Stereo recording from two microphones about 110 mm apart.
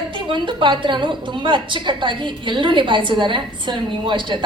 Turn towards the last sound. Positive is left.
turn(degrees=-45)  # may be behind; listen again after turning